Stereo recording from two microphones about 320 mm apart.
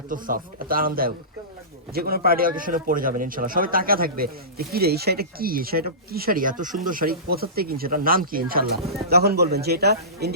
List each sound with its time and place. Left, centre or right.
0.1 s a man's voice: right